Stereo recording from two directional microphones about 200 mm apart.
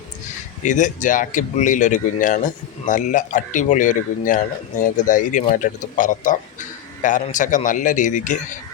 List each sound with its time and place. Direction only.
0.6 s speech: 40° left (ahead or behind)